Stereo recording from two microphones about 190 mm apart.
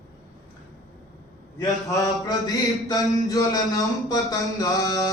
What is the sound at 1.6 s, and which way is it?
Mantra, 15° left (ahead or behind).